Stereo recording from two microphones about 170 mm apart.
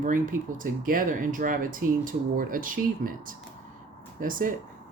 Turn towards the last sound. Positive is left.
turn(degrees=-55)  # may be behind; listen again after turning